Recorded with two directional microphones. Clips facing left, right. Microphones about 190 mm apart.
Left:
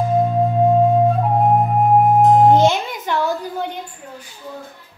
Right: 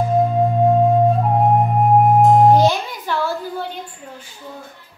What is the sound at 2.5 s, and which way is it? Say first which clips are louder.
Music: even; 20° left (ahead or behind).